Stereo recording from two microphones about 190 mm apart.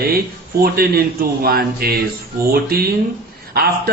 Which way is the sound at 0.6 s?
50° right (ahead or behind).